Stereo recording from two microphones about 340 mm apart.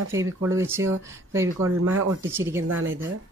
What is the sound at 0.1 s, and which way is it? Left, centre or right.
Speech, centre.